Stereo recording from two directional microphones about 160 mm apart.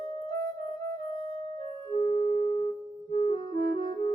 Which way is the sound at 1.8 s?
35° left (ahead or behind).